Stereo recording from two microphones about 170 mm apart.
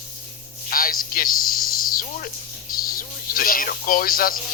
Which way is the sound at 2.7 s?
60° left (ahead or behind).